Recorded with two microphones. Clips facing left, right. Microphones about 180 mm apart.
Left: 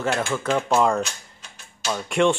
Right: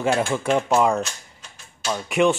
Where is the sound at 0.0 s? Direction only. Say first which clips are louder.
Right 3 dB; 10° right (ahead or behind).